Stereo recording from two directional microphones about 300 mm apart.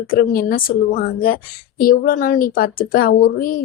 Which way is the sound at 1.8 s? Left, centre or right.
Left.